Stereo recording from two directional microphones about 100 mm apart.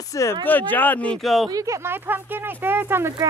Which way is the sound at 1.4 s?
35° right (ahead or behind).